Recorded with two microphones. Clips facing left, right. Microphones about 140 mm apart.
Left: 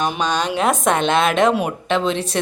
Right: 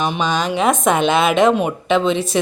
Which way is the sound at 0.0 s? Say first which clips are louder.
Right 1 dB; centre (ahead or behind).